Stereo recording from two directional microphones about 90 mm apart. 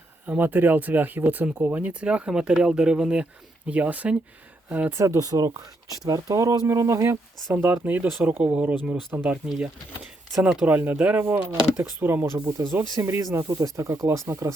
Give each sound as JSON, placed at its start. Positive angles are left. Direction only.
{"t": 0.3, "sound": "speech", "side_deg": -20}
{"t": 4.9, "sound": "speech", "side_deg": -35}
{"t": 9.5, "sound": "speech", "side_deg": -5}